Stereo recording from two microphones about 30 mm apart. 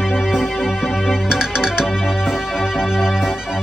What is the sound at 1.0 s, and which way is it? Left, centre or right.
Music, right.